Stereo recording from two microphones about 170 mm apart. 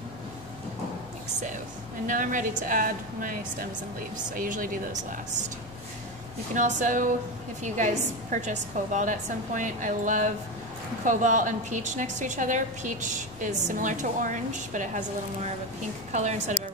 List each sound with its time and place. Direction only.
2.0 s a woman's voice: 50° right (ahead or behind)
6.5 s a woman's voice: 50° right (ahead or behind)